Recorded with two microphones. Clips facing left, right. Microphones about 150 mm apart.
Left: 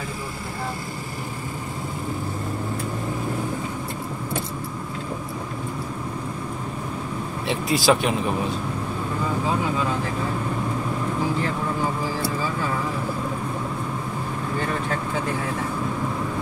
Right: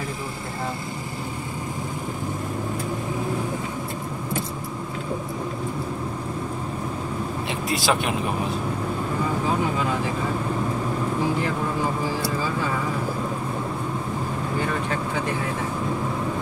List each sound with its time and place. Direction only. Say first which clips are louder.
7.4 s speech: left 5 dB; centre (ahead or behind)